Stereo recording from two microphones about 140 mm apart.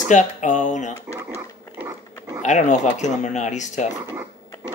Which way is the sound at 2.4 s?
60° left (ahead or behind).